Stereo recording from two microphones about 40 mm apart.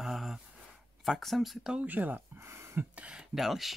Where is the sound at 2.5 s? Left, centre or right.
Right.